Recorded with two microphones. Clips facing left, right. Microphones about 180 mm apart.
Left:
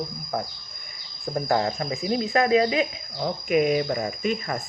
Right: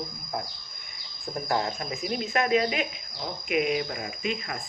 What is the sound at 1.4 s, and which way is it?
Speech, 40° left (ahead or behind).